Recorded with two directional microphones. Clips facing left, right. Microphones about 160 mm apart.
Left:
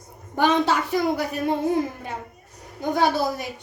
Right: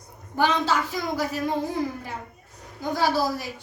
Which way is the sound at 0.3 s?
60° left (ahead or behind).